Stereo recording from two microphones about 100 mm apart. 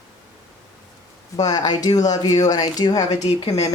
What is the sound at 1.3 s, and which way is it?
Speech, 40° left (ahead or behind).